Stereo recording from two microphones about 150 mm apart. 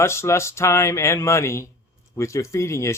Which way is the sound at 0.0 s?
15° left (ahead or behind).